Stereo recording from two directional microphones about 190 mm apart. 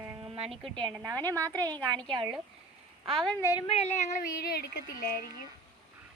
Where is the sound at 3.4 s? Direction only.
20° left (ahead or behind).